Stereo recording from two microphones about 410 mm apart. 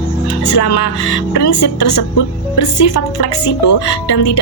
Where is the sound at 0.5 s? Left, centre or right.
Left.